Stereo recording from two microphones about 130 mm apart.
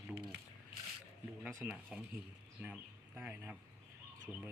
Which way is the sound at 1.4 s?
5° right (ahead or behind).